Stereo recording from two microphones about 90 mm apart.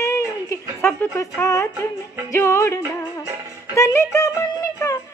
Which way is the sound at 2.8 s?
30° right (ahead or behind).